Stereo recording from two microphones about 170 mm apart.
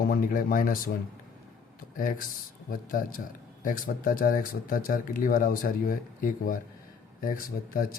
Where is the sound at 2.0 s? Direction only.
55° left (ahead or behind).